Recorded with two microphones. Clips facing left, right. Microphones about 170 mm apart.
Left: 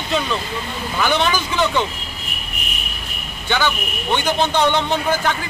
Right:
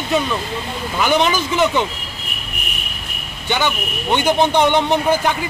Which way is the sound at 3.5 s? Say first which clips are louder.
Right 1 dB; 15° right (ahead or behind).